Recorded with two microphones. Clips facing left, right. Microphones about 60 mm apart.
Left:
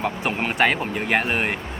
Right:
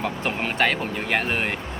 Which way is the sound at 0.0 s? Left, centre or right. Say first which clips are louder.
Left 2 dB; centre.